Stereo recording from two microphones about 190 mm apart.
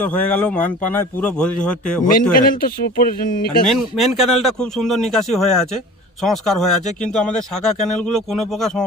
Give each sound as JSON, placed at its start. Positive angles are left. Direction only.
{"t": 0.0, "sound": "speech", "side_deg": 5}
{"t": 2.3, "sound": "speech", "side_deg": 50}
{"t": 3.7, "sound": "speech", "side_deg": 0}